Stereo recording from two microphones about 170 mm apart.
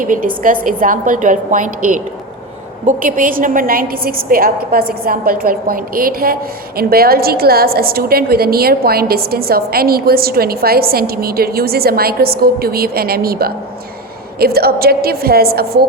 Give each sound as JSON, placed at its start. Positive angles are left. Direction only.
{"t": 0.0, "sound": "a woman's voice", "side_deg": -55}